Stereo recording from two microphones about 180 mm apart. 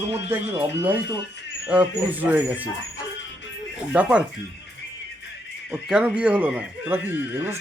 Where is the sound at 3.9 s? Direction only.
5° right (ahead or behind).